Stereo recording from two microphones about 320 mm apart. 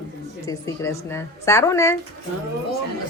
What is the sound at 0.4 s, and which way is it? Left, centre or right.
A woman's voice, centre.